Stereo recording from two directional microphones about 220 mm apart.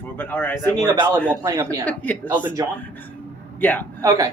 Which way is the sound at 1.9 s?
5° left (ahead or behind).